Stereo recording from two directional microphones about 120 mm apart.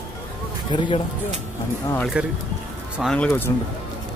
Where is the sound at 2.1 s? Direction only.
10° right (ahead or behind).